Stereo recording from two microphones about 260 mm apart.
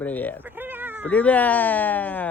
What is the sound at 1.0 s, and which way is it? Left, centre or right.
Speech, centre.